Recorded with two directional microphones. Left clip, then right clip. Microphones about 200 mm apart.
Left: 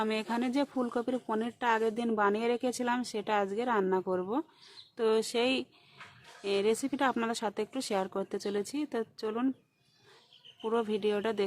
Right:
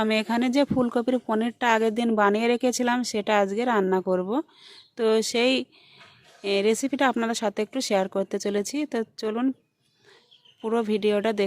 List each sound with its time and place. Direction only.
0.0 s speech: 30° right (ahead or behind)
10.6 s speech: 25° right (ahead or behind)